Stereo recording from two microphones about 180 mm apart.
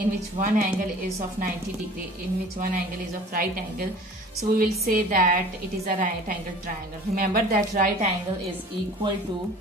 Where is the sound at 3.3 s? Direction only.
55° right (ahead or behind).